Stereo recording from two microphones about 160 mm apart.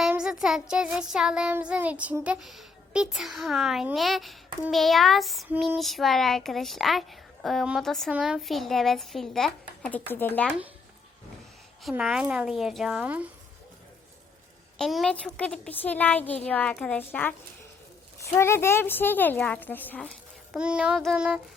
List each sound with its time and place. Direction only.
0.1 s child singing: 5° right (ahead or behind); by 10.5 s 10° left (ahead or behind)
11.8 s child singing: centre (ahead or behind)
14.8 s speech: centre (ahead or behind)
20.6 s child singing: 5° right (ahead or behind)